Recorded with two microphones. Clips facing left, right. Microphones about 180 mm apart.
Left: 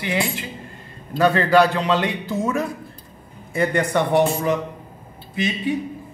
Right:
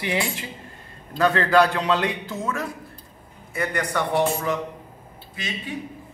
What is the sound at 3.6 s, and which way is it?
Speech, 25° left (ahead or behind).